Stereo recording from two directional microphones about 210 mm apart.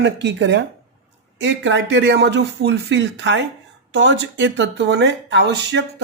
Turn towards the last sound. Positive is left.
turn(degrees=-55)  # may be behind; listen again after turning